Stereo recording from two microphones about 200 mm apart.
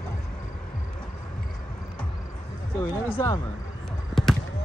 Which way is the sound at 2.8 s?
10° left (ahead or behind).